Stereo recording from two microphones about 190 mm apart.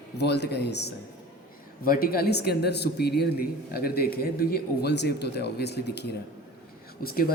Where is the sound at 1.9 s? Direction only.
50° left (ahead or behind).